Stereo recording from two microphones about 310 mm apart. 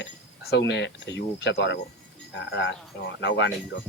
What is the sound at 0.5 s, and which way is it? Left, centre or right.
Speech, left.